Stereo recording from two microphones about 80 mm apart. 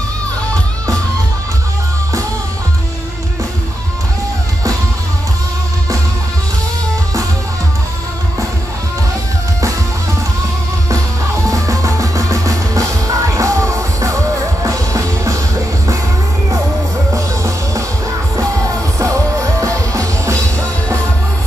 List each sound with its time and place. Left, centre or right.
11.4 s music: right
17.1 s music: right